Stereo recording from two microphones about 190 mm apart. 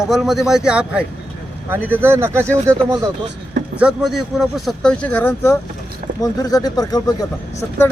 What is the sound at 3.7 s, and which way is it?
Speech, 5° right (ahead or behind).